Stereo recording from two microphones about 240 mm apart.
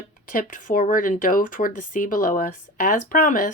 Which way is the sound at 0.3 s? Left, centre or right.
Left.